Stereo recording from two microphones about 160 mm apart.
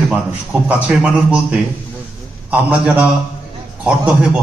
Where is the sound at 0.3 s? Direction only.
10° right (ahead or behind).